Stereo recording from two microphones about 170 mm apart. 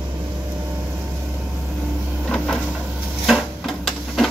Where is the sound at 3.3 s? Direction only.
Centre (ahead or behind).